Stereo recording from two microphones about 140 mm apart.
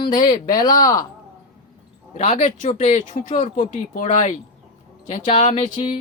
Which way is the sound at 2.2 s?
50° left (ahead or behind).